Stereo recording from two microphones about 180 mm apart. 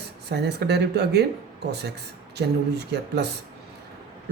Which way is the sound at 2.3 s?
70° right (ahead or behind).